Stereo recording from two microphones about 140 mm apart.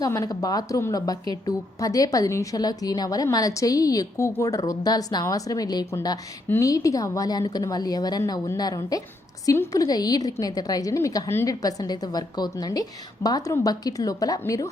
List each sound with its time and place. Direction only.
0.0 s a woman's voice: 25° left (ahead or behind)